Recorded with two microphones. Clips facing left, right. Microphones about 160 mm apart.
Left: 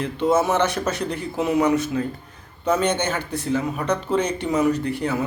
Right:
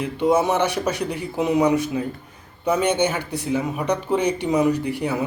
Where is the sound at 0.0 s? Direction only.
15° right (ahead or behind).